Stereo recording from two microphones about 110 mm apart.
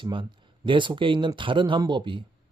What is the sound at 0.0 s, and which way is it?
A man's voice, 50° right (ahead or behind).